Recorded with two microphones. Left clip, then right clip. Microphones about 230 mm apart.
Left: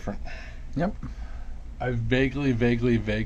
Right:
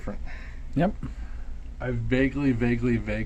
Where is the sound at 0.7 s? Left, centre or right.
Right.